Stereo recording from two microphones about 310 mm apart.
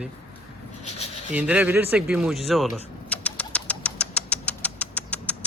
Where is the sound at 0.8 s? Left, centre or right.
Left.